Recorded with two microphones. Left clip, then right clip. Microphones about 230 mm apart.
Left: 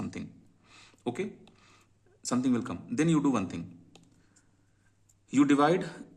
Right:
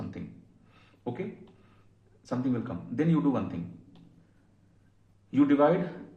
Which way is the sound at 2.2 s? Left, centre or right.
Left.